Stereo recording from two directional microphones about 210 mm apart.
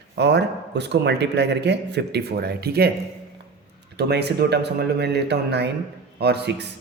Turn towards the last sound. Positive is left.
turn(degrees=-55)  # may be behind; listen again after turning